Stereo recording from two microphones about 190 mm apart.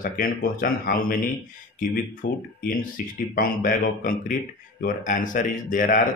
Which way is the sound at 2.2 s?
50° left (ahead or behind).